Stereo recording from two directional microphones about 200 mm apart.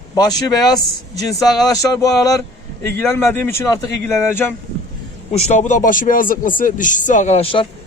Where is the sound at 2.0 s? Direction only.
15° left (ahead or behind).